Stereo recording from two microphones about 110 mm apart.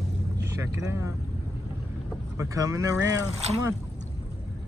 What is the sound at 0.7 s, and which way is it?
Speech, 30° right (ahead or behind).